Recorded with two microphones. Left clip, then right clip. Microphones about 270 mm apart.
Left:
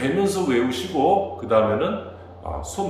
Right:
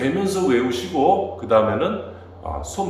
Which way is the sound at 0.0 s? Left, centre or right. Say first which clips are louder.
Right 1 dB; centre.